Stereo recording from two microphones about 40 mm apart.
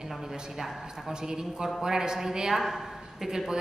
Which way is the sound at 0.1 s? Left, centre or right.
Centre.